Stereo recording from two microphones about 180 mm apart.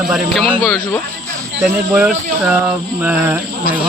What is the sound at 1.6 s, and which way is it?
Speech, 5° right (ahead or behind).